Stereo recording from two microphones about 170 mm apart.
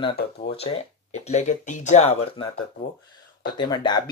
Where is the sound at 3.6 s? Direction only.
25° left (ahead or behind).